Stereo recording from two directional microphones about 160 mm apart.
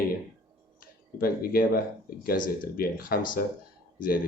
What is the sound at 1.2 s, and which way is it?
Speech, 70° left (ahead or behind).